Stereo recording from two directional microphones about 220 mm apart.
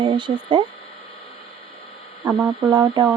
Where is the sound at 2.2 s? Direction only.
10° right (ahead or behind).